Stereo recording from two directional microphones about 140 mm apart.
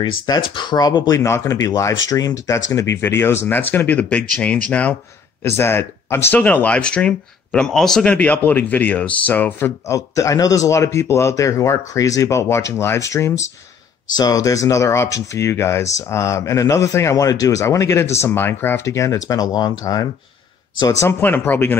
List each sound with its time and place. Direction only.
0.0 s speech: 30° left (ahead or behind); by 21.7 s 15° left (ahead or behind)